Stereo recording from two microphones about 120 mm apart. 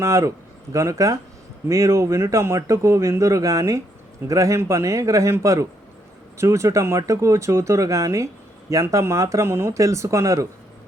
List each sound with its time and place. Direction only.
0.0 s speech: 25° right (ahead or behind)